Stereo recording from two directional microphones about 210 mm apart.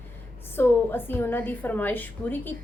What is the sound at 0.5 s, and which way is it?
A woman's voice, 10° left (ahead or behind).